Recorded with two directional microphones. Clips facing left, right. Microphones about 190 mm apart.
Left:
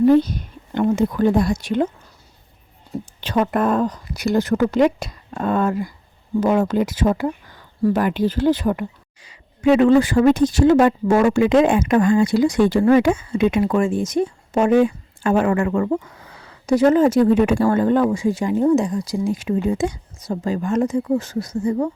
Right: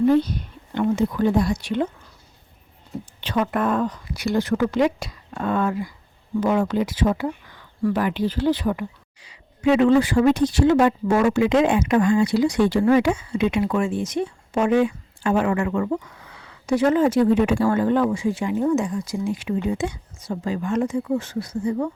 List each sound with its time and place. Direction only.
0.2 s speech: 45° left (ahead or behind)
3.2 s speech: 40° left (ahead or behind)